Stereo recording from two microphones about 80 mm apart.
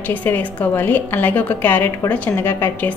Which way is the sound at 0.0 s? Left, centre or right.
Left.